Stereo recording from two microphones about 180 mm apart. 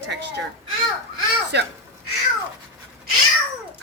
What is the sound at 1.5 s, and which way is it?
Speech, 70° right (ahead or behind).